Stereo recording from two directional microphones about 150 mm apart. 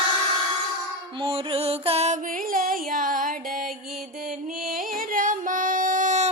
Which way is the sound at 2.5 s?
70° right (ahead or behind).